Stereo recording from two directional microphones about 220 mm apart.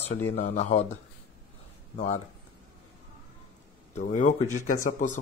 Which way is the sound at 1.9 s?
30° left (ahead or behind).